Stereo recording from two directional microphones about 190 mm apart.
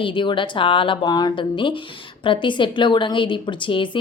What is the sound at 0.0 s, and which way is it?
A woman's voice, 25° left (ahead or behind).